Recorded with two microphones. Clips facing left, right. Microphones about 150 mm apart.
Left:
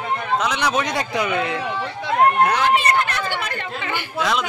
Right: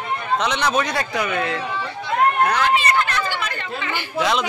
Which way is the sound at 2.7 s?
50° left (ahead or behind).